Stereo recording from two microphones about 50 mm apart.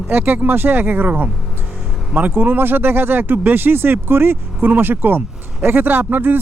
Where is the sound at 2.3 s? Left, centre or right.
Right.